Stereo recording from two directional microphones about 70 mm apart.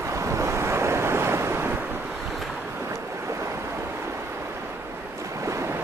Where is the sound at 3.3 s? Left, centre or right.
Right.